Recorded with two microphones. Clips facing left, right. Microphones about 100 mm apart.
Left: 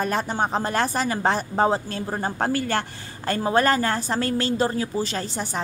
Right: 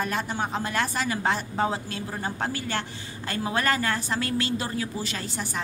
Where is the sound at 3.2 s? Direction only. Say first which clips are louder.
Left 6 dB; 35° left (ahead or behind).